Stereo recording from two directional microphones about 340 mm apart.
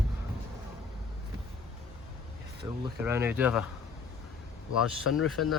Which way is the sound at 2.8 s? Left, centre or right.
Centre.